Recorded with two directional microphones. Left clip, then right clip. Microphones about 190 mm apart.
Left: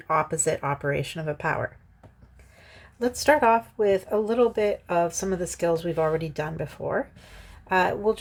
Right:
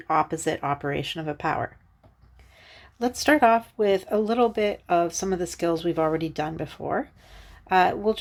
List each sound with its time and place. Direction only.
0.0 s speech: 25° right (ahead or behind)